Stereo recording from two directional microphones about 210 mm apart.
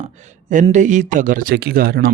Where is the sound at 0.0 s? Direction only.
35° right (ahead or behind).